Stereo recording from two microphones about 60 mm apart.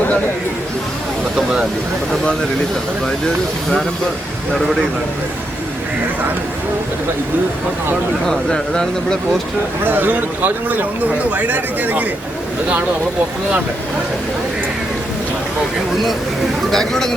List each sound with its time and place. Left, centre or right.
4.5 s a man's voice: centre
8.3 s speech: centre
9.8 s a man's voice: right
16.7 s speech: centre